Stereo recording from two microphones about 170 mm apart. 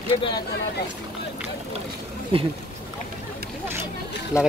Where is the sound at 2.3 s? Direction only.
30° right (ahead or behind).